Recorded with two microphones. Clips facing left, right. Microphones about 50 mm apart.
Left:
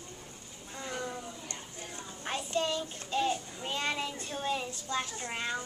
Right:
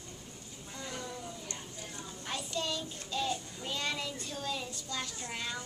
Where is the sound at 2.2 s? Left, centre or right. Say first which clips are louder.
Left 5 dB; left.